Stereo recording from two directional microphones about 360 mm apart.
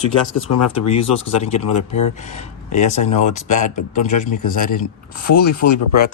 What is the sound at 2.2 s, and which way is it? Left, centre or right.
Speech, centre.